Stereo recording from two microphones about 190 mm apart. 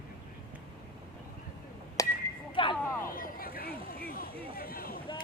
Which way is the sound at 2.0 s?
15° left (ahead or behind).